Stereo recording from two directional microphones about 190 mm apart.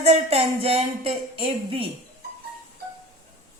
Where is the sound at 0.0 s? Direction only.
30° right (ahead or behind).